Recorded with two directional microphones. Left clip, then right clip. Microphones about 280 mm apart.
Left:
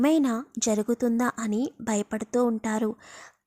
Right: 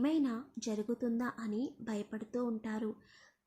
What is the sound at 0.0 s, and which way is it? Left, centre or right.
A woman's voice, left.